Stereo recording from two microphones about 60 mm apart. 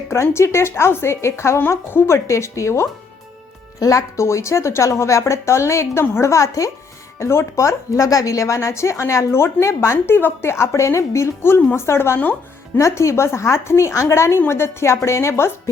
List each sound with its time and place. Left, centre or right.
0.1 s speech: left
3.8 s speech: left
7.2 s speech: left
10.2 s speech: left